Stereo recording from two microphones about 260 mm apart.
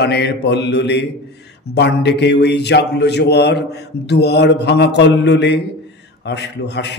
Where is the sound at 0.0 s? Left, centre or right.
Left.